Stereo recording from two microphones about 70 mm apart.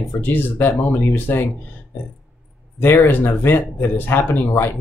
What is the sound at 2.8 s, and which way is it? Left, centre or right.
Speech, left.